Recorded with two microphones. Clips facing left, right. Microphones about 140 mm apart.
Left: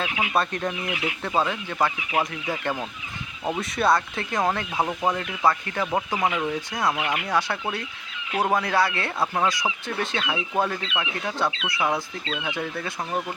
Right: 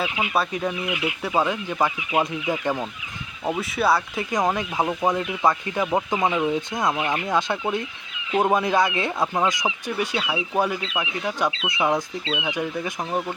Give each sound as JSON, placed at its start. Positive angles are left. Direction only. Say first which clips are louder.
{"t": 0.0, "sound": "speech", "louder": "right 1 dB", "side_deg": -10}
{"t": 3.4, "sound": "speech", "louder": "right 1 dB", "side_deg": -5}